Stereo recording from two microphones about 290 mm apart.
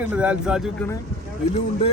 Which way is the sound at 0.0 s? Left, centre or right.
Centre.